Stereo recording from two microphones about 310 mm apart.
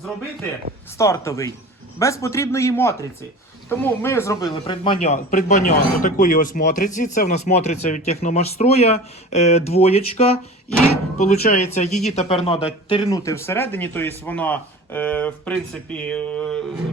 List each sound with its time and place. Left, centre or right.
0.9 s speech: centre